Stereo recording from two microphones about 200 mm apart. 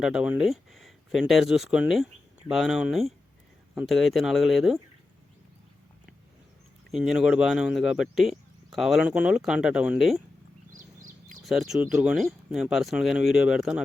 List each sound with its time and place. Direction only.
0.0 s speech: 5° right (ahead or behind)
6.9 s speech: 5° right (ahead or behind)
10.8 s a sound: 40° right (ahead or behind)
11.4 s speech: centre (ahead or behind)